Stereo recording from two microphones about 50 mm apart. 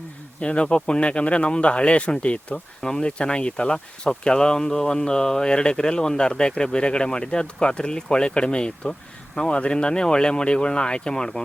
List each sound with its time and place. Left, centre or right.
0.3 s speech: left